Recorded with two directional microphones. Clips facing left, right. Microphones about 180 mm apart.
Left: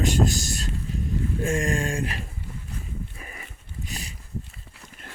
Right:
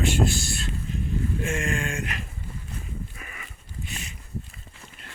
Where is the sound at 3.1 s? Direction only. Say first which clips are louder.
Left 1 dB; 35° left (ahead or behind).